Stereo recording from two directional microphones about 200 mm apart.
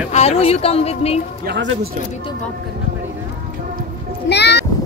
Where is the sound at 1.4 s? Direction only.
60° right (ahead or behind).